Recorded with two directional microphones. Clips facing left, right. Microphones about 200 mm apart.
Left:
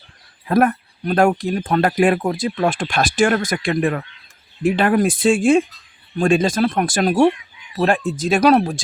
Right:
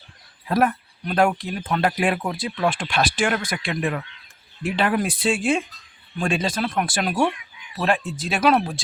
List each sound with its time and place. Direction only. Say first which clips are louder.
0.4 s speech: left 4 dB; 50° left (ahead or behind)